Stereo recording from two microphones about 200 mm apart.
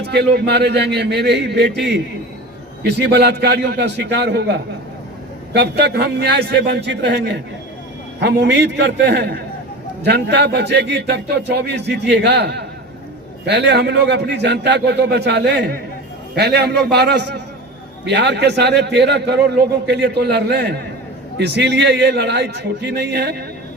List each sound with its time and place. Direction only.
0.1 s a man's voice: 55° right (ahead or behind)
5.5 s a man's voice: 55° right (ahead or behind)